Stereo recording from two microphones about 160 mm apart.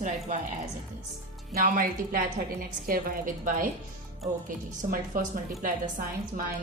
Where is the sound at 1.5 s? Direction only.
60° right (ahead or behind).